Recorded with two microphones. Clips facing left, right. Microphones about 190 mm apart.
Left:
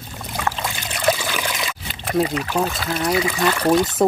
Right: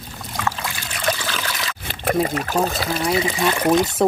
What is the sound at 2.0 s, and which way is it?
Speech, 50° right (ahead or behind).